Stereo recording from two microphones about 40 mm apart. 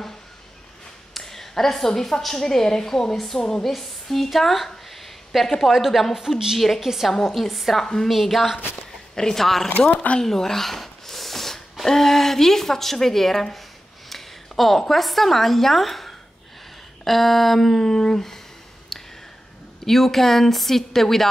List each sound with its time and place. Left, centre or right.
1.1 s a woman's voice: centre
7.2 s a woman's voice: centre
7.8 s a woman's voice: centre
8.1 s a woman's voice: centre
8.9 s speech: centre
9.8 s speech: left
10.2 s a sound: centre
11.8 s a woman's voice: centre
18.9 s a sound: centre
19.8 s a woman's voice: centre